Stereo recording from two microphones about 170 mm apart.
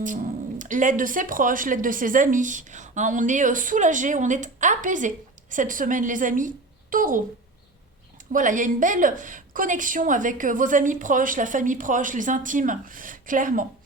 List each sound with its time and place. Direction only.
0.0 s speech: 50° right (ahead or behind)
8.3 s speech: 50° right (ahead or behind)